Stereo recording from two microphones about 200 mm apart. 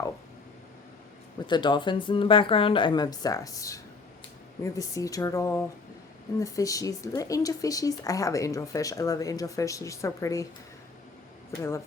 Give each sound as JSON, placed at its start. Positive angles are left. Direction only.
{"t": 1.5, "sound": "speech", "side_deg": 25}